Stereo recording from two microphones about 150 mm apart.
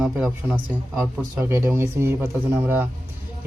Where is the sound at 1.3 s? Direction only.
15° right (ahead or behind).